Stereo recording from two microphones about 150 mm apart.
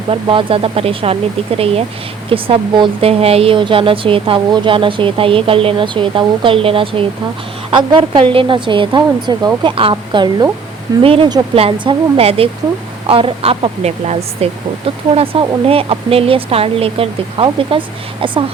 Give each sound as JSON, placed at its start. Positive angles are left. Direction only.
{"t": 0.1, "sound": "speech", "side_deg": -35}